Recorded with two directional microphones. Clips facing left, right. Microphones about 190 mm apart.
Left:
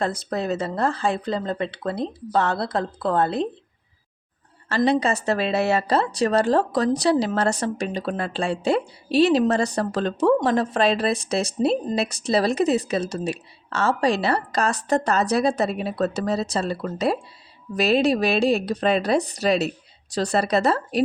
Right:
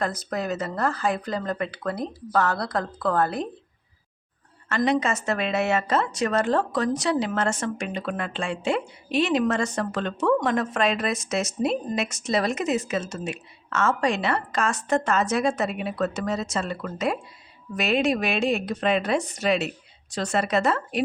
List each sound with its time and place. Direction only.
0.0 s speech: 30° left (ahead or behind)
4.7 s a woman's voice: 35° left (ahead or behind)